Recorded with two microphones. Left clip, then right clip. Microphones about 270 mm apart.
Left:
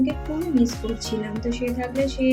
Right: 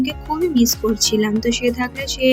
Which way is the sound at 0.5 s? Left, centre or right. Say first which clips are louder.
Right 6 dB; right.